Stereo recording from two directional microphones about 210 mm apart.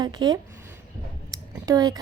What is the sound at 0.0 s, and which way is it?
Speech, 20° right (ahead or behind).